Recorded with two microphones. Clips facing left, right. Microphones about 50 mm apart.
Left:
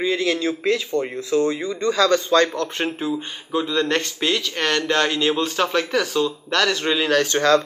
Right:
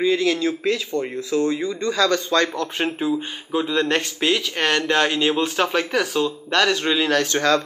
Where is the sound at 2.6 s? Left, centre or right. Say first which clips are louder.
Right 1 dB; centre.